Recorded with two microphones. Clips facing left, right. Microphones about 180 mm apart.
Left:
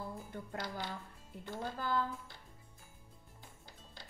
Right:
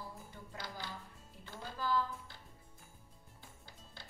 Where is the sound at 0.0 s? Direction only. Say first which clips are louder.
Left 6 dB; 55° left (ahead or behind).